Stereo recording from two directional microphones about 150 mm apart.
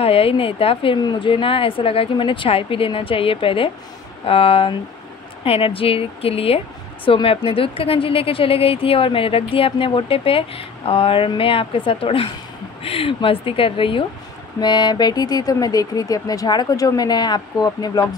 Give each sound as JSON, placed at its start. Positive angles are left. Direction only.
{"t": 0.0, "sound": "a woman's voice", "side_deg": 40}